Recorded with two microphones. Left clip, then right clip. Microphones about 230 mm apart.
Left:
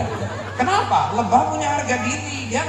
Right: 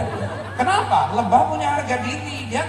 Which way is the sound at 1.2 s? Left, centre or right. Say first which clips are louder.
Right 1 dB; right.